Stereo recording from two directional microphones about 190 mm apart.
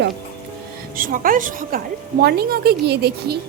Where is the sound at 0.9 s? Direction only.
45° right (ahead or behind).